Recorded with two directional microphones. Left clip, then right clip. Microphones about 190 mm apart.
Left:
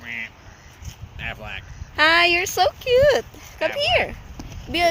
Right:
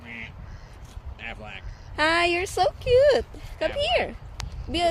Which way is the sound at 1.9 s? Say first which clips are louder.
Left 6 dB; 5° right (ahead or behind).